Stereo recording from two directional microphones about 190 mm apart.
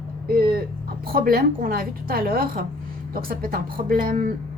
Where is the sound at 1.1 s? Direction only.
50° right (ahead or behind).